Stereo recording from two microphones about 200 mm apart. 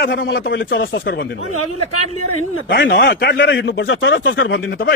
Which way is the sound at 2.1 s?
90° left.